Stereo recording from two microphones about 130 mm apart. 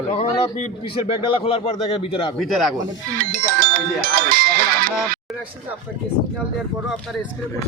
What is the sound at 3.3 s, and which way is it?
Speech, 90° right.